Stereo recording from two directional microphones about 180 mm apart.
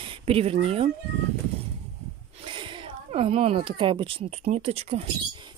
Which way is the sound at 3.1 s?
35° right (ahead or behind).